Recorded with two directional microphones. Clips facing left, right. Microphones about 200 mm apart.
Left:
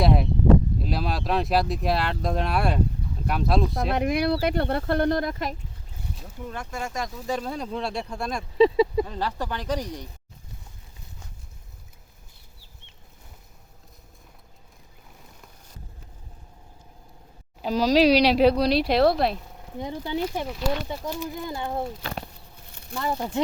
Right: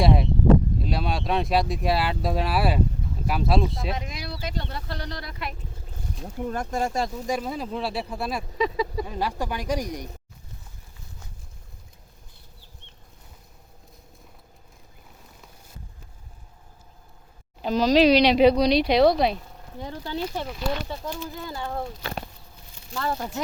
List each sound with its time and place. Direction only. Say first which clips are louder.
0.0 s a sound: even; centre (ahead or behind)
0.8 s speech: even; centre (ahead or behind)
3.9 s speech: left 12 dB; 60° left (ahead or behind); by 5.5 s 45° left (ahead or behind)
6.4 s speech: right 6 dB; 45° right (ahead or behind)
7.3 s speech: right 1 dB; 10° right (ahead or behind)
8.5 s a sound: left 9 dB; 25° left (ahead or behind)
9.0 s speech: right 1 dB; 10° right (ahead or behind)
17.6 s speech: right 1 dB; 5° left (ahead or behind)
19.7 s speech: left 3 dB; 15° left (ahead or behind)
23.0 s speech: left 1 dB; 15° left (ahead or behind)